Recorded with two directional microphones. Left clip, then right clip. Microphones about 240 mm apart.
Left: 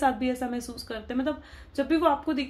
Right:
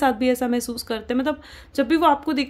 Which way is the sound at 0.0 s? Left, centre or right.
Right.